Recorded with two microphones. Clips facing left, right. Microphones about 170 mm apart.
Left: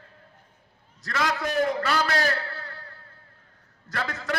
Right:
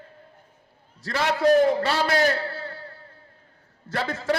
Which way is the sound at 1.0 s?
30° right (ahead or behind).